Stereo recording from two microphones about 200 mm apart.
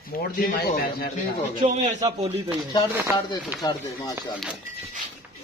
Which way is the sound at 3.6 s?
20° left (ahead or behind).